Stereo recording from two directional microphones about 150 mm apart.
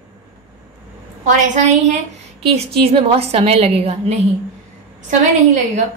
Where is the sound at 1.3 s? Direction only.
50° right (ahead or behind).